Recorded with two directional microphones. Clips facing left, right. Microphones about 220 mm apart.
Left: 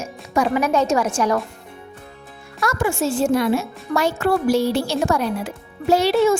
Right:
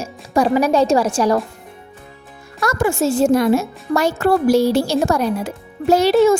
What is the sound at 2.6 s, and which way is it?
Speech, 40° right (ahead or behind).